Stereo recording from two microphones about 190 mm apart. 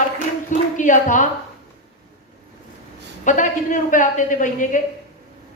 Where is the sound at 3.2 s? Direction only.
40° left (ahead or behind).